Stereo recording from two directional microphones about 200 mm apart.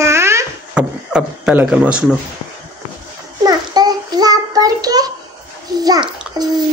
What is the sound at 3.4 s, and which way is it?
Child singing, 20° right (ahead or behind).